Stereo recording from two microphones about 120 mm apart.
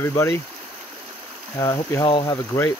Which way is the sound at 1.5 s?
30° left (ahead or behind).